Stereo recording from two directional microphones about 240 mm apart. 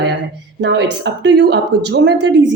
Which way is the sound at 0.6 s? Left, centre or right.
Right.